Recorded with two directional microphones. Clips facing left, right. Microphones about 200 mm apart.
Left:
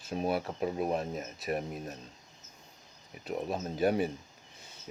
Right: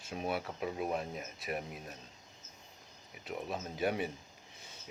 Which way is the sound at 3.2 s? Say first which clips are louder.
Left 5 dB; 40° left (ahead or behind).